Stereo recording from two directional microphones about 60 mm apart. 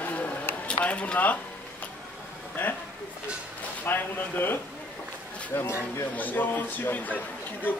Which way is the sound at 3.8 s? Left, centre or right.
Left.